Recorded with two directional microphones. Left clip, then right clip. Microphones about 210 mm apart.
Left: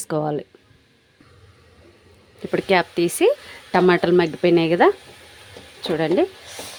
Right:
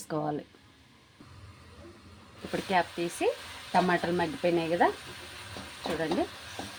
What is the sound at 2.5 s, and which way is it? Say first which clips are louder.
Speech: left 10 dB; 45° left (ahead or behind).